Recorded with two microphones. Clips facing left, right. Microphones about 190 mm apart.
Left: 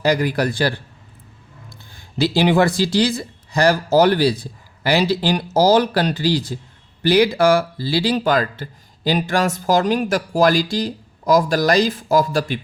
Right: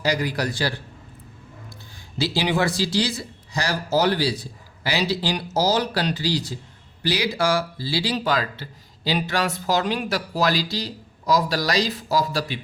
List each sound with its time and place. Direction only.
0.0 s a man's voice: 55° left (ahead or behind)
2.1 s speech: 55° left (ahead or behind)